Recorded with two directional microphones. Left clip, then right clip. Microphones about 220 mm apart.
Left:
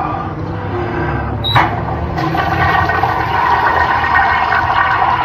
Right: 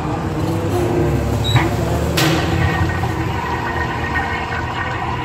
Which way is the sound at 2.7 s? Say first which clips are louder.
Left 9 dB; 40° left (ahead or behind).